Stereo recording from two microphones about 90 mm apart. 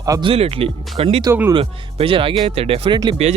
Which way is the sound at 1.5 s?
80° right.